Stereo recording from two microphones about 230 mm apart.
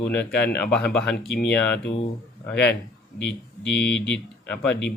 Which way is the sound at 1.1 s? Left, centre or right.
Left.